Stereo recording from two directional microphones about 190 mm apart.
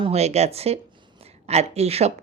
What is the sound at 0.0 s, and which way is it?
Speech, 35° right (ahead or behind).